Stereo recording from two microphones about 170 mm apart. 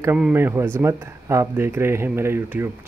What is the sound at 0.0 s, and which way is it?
Speech, 10° right (ahead or behind).